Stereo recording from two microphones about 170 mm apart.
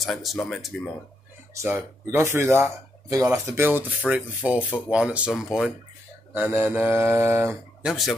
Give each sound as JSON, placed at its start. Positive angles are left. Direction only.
{"t": 0.0, "sound": "speech", "side_deg": 0}
{"t": 1.5, "sound": "speech", "side_deg": -15}